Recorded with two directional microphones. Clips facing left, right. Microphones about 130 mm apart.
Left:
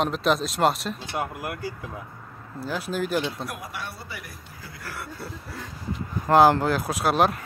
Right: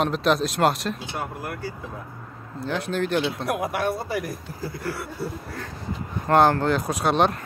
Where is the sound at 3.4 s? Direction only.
60° right (ahead or behind); by 4.4 s 45° right (ahead or behind).